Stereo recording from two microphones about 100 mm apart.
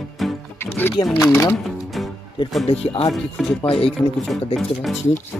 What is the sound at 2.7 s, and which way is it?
Speech, 80° left.